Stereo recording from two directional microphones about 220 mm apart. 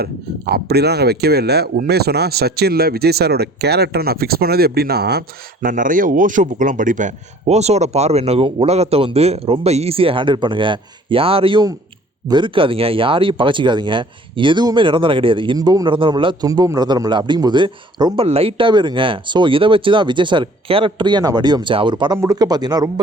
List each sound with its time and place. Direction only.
0.0 s speech: 45° right (ahead or behind); by 22.9 s 20° right (ahead or behind)